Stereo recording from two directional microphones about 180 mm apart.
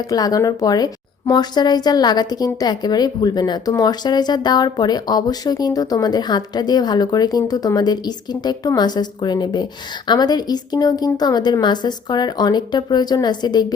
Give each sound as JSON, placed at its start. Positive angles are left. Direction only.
{"t": 0.1, "sound": "a woman's voice", "side_deg": 20}